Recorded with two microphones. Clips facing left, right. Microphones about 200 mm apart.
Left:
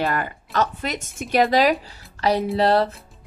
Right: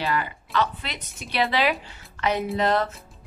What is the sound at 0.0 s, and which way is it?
Speech, 50° left (ahead or behind).